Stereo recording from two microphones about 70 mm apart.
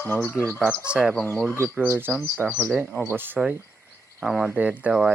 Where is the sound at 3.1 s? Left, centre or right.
Right.